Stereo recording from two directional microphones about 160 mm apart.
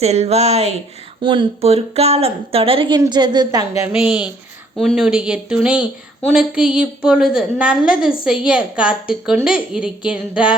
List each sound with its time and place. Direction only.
0.0 s a woman's voice: 40° right (ahead or behind)
1.2 s a woman's voice: 30° right (ahead or behind)
4.0 s a woman's voice: 5° right (ahead or behind)